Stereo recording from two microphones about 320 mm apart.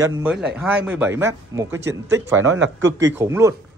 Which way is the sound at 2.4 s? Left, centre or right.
Right.